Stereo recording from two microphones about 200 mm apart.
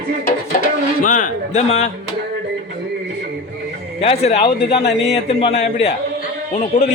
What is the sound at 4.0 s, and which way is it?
Speech, 30° left (ahead or behind).